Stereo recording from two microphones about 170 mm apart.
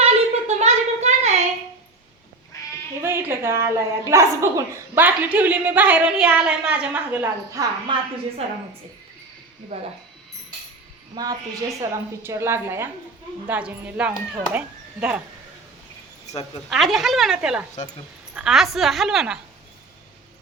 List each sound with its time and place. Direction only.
0.0 s a sound: 40° right (ahead or behind)
3.0 s speech: 15° right (ahead or behind)
7.9 s a woman's voice: 30° right (ahead or behind)
11.1 s a woman's voice: 20° right (ahead or behind)
16.6 s a woman's voice: centre (ahead or behind)